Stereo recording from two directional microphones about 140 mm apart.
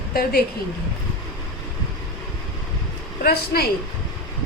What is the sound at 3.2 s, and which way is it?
Speech, 90° left.